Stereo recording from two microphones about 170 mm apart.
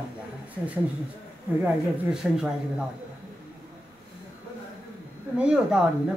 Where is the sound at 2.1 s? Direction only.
5° right (ahead or behind).